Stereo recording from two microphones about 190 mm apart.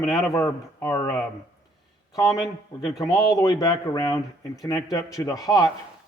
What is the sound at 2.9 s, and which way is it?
Speech, 20° left (ahead or behind).